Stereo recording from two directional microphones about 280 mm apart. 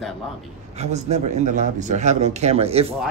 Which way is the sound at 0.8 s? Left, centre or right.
Right.